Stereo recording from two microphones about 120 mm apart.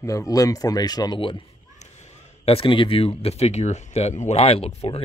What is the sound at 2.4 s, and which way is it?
Speech, 50° left (ahead or behind).